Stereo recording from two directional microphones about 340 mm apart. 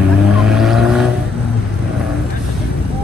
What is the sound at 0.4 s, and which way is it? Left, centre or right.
Vehicle, centre.